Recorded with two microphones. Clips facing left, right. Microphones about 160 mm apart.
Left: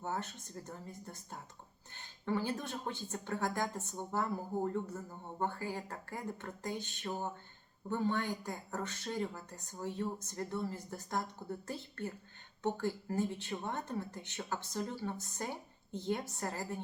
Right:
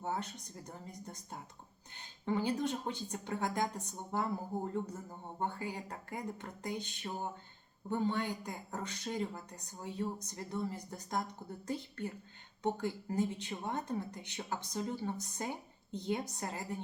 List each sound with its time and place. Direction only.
0.0 s speech: 15° right (ahead or behind)